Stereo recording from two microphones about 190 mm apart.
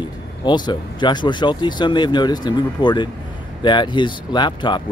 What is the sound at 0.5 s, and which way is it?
Speech, 25° left (ahead or behind).